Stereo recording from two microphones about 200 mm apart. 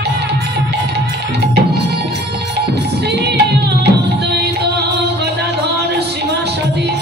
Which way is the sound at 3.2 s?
55° right (ahead or behind).